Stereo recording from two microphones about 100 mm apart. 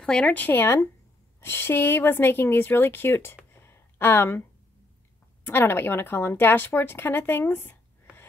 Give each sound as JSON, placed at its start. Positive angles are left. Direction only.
{"t": 0.0, "sound": "speech", "side_deg": 10}
{"t": 3.5, "sound": "a sound", "side_deg": 25}
{"t": 5.4, "sound": "speech", "side_deg": 20}